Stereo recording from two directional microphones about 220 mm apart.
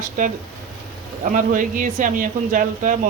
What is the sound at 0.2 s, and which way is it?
Speech, 35° right (ahead or behind).